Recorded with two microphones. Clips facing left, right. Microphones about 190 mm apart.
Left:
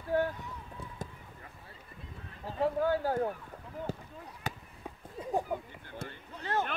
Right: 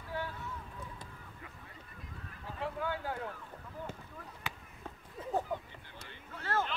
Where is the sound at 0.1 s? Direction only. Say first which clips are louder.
Left 10 dB; 50° left (ahead or behind).